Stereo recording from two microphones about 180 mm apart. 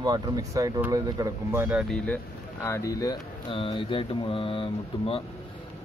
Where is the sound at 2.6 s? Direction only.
15° left (ahead or behind).